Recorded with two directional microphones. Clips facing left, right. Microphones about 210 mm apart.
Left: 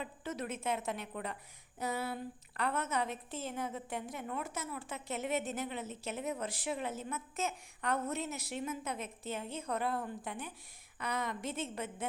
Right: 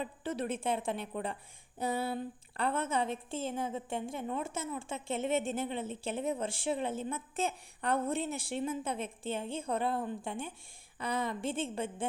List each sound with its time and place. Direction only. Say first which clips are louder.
0.0 s a woman's voice: right 4 dB; 30° right (ahead or behind)